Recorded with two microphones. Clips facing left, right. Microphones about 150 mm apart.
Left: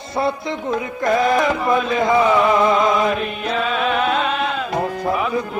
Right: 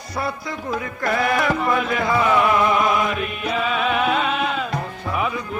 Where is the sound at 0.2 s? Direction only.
25° left (ahead or behind).